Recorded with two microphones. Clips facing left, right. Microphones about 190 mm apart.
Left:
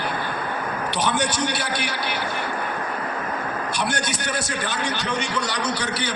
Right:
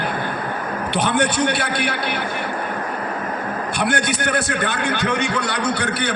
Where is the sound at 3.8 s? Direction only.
55° right (ahead or behind).